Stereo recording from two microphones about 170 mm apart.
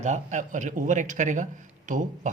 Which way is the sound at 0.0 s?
45° right (ahead or behind).